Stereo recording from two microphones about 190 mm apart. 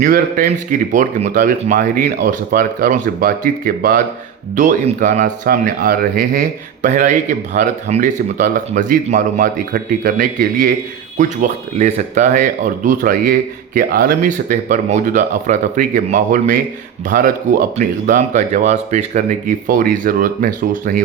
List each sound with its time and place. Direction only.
0.0 s a man's voice: 45° right (ahead or behind)